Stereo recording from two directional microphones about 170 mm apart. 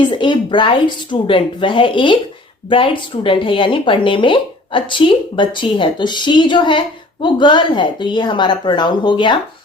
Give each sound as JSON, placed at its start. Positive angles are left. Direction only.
{"t": 0.0, "sound": "speech", "side_deg": 25}